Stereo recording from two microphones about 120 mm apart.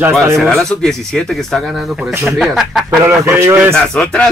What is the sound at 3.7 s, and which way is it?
Speech, 5° left (ahead or behind).